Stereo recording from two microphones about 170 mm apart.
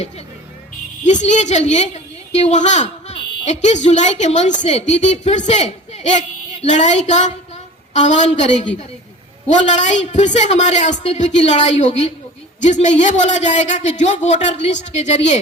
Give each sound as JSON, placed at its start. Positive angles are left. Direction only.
{"t": 1.0, "sound": "a man's voice", "side_deg": 45}
{"t": 9.6, "sound": "a man's voice", "side_deg": 45}